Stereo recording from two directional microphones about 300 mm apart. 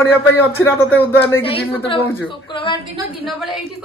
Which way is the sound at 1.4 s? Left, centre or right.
Centre.